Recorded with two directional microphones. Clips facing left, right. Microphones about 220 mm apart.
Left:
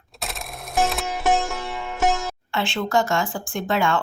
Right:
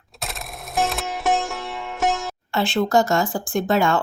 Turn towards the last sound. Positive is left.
turn(degrees=-40)  # may be behind; listen again after turning